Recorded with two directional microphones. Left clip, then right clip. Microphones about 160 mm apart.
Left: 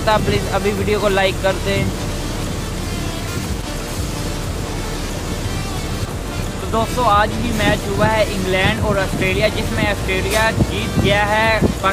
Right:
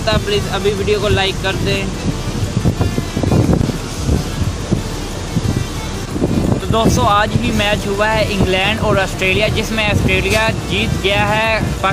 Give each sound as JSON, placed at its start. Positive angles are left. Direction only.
{"t": 0.0, "sound": "speech", "side_deg": 20}
{"t": 6.7, "sound": "speech", "side_deg": -30}